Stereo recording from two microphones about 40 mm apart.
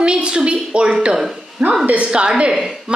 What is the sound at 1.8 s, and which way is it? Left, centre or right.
Speech, right.